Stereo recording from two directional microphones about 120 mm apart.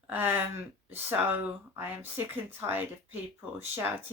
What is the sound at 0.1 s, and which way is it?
Speech, 15° right (ahead or behind).